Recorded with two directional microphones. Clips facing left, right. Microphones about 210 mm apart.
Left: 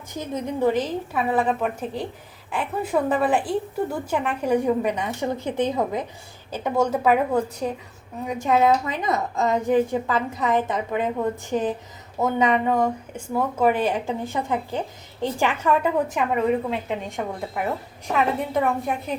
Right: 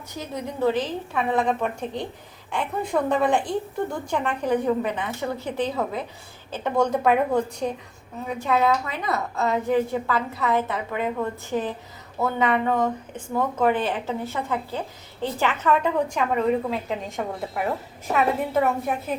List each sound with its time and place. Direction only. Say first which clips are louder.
0.2 s a woman's voice: left 2 dB; 15° left (ahead or behind)
8.4 s a woman's voice: left 3 dB; 20° left (ahead or behind); by 19.1 s 5° right (ahead or behind)